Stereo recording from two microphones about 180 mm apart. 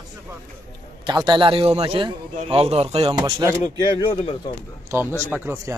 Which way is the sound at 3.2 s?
20° right (ahead or behind).